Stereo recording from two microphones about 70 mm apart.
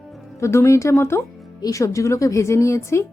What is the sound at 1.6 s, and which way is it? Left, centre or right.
Speech, left.